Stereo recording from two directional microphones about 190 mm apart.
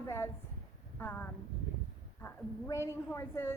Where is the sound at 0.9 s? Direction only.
10° left (ahead or behind).